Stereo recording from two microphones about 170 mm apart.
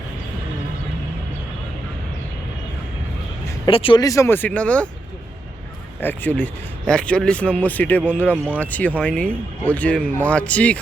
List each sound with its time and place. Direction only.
3.7 s a man's voice: 30° left (ahead or behind); by 4.9 s 5° left (ahead or behind)
6.0 s a man's voice: 10° left (ahead or behind)